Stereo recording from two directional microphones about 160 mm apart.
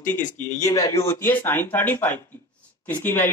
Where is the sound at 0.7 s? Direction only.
20° left (ahead or behind).